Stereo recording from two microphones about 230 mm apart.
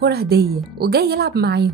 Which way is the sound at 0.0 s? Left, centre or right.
Right.